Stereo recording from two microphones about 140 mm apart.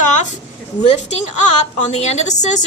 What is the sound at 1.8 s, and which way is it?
Speech, 55° left (ahead or behind).